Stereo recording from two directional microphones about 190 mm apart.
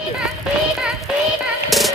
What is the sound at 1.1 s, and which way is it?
Child singing, 5° right (ahead or behind).